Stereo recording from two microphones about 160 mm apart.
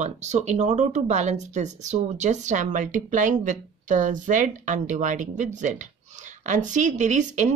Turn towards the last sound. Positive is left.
turn(degrees=-50)  # may be behind; listen again after turning